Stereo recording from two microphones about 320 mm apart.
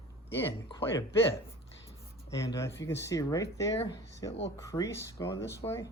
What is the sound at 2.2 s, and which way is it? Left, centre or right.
Speech, centre.